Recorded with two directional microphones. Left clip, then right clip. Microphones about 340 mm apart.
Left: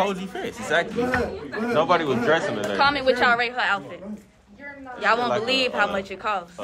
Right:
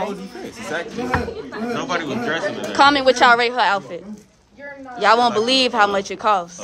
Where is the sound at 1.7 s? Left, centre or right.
Centre.